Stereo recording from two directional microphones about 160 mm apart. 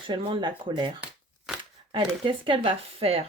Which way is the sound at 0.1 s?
30° right (ahead or behind).